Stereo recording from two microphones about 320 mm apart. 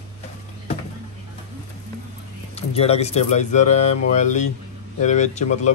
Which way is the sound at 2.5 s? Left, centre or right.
Centre.